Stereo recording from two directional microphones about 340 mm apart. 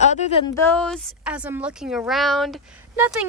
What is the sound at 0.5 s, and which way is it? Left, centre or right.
Speech, centre.